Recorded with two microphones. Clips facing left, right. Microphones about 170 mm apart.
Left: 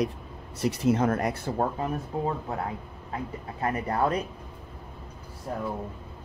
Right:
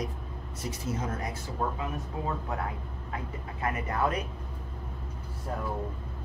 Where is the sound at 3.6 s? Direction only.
35° left (ahead or behind).